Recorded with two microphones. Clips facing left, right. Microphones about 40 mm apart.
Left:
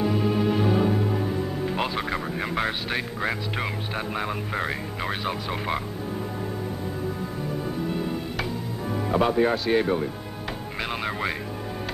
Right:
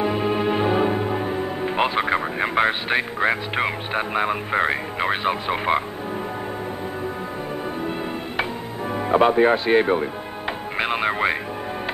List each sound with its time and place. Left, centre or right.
0.0 s music: right
7.8 s music: right
8.9 s speech: right
10.8 s music: right